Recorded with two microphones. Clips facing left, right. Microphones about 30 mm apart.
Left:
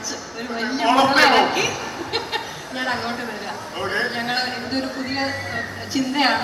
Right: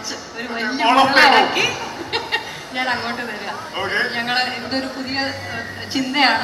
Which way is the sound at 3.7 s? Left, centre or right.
Right.